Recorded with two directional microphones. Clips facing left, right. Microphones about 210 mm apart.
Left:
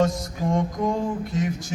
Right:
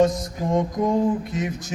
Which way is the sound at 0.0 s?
20° right (ahead or behind).